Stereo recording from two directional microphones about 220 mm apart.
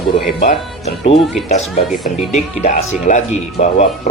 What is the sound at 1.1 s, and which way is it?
Speech, centre (ahead or behind).